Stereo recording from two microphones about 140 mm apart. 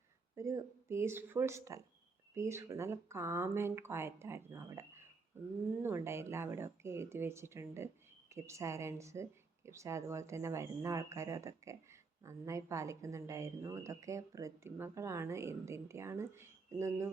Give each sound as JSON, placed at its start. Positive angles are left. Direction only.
{"t": 0.3, "sound": "speech", "side_deg": -20}